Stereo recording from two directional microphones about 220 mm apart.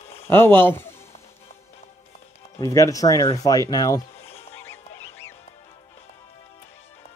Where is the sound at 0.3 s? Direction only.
10° left (ahead or behind).